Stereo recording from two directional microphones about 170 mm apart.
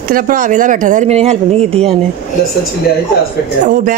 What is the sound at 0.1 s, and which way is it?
Speech, 50° right (ahead or behind).